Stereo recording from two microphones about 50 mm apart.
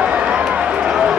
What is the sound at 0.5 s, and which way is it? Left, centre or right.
Run, right.